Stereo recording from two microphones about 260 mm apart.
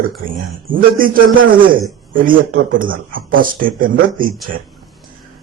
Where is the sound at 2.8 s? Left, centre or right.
Right.